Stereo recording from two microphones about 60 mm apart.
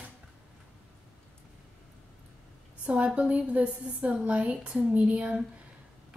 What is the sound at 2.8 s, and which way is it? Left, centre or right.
A woman's voice, centre.